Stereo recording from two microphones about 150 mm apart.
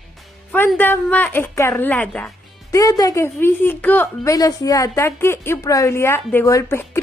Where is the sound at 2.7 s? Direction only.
25° left (ahead or behind).